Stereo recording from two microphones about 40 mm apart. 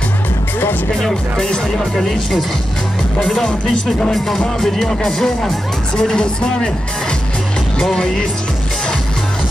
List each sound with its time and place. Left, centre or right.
0.9 s speech: centre
4.4 s speech: centre